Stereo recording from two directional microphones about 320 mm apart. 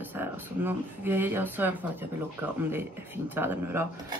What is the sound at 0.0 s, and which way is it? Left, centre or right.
Speech, centre.